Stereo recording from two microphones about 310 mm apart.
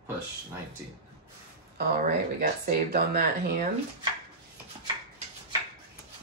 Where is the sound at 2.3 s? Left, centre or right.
Right.